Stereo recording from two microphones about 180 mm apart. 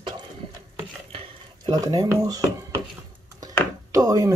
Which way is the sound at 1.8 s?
20° right (ahead or behind).